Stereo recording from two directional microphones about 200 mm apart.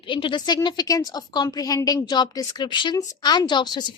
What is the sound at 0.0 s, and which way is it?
A woman's voice, 25° left (ahead or behind).